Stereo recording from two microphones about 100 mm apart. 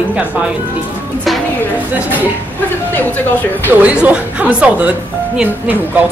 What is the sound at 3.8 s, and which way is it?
A woman's voice, 15° right (ahead or behind).